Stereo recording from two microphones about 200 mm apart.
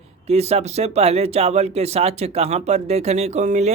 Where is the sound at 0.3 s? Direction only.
30° right (ahead or behind).